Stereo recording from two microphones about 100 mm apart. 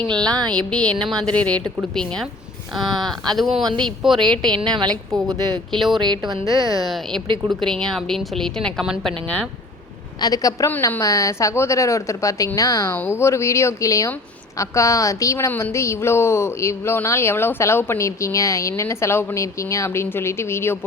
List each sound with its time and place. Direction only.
0.1 s speech: 10° left (ahead or behind)
5.1 s a woman's voice: 40° right (ahead or behind)
5.7 s speech: centre (ahead or behind)
6.0 s speech: 45° right (ahead or behind)
6.4 s a woman's voice: 35° left (ahead or behind)
6.8 s speech: centre (ahead or behind)
8.8 s speech: 5° right (ahead or behind)
9.2 s speech: 10° left (ahead or behind)
10.2 s a woman's voice: 40° left (ahead or behind); by 20.7 s 25° left (ahead or behind)